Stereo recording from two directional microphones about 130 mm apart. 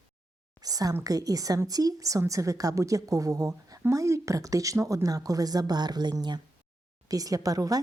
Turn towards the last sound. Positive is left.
turn(degrees=-25)  # may be behind; listen again after turning